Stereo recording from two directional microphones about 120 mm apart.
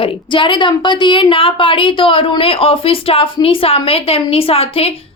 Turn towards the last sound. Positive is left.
turn(degrees=55)  # may be behind; listen again after turning